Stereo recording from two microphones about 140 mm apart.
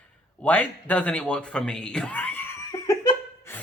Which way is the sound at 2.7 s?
20° left (ahead or behind).